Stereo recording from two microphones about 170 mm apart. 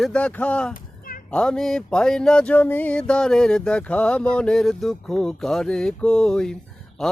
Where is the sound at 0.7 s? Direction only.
55° left (ahead or behind).